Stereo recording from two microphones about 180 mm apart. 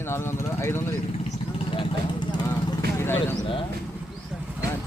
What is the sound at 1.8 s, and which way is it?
Speech, 25° left (ahead or behind).